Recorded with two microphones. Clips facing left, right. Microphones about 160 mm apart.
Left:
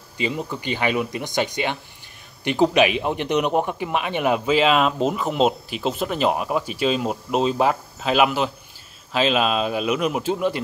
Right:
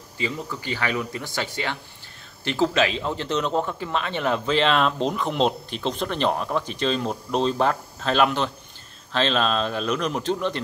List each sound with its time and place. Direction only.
0.2 s speech: 20° left (ahead or behind)